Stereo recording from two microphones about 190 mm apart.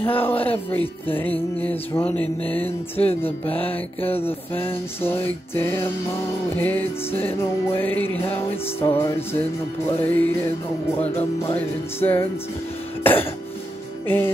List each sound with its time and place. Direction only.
0.1 s speech: 30° left (ahead or behind)
1.6 s music: 10° left (ahead or behind)
2.6 s speech: 30° left (ahead or behind)
5.0 s music: 10° left (ahead or behind)
13.0 s cough: 10° left (ahead or behind)
14.0 s music: 10° left (ahead or behind)